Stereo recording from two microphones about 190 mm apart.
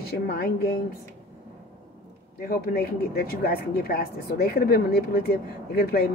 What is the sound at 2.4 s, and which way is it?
Speech, 55° left (ahead or behind).